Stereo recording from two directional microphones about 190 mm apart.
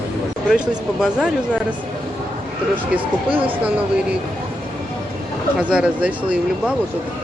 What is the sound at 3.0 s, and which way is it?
Speech, 25° right (ahead or behind).